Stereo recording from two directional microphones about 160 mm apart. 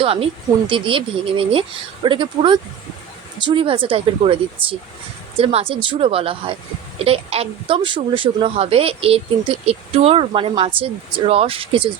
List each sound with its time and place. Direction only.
0.0 s a woman's voice: 35° right (ahead or behind)